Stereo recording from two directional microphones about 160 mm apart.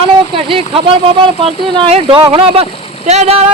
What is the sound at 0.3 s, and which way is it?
Speech, 35° right (ahead or behind).